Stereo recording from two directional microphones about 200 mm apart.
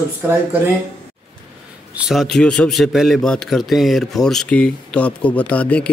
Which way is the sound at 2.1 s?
Centre (ahead or behind).